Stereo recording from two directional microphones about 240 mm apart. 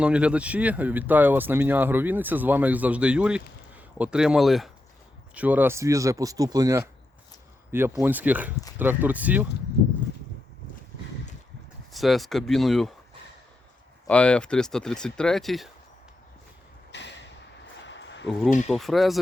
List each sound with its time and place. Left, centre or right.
0.0 s speech: centre
11.9 s speech: centre
14.1 s speech: centre
16.9 s a sound: left
18.3 s speech: centre